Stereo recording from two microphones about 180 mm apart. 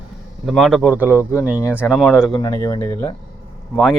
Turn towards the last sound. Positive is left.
turn(degrees=0)  # may be behind; listen again after turning